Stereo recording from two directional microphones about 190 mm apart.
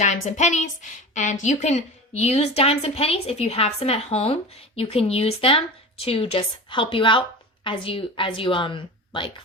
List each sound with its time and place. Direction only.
0.0 s a woman's voice: 40° left (ahead or behind)